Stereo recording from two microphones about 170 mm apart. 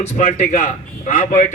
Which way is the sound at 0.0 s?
40° left (ahead or behind).